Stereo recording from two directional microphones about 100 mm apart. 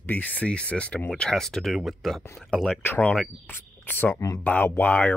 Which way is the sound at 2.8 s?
20° left (ahead or behind).